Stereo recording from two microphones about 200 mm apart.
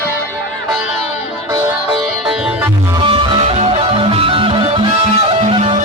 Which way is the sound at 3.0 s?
25° right (ahead or behind).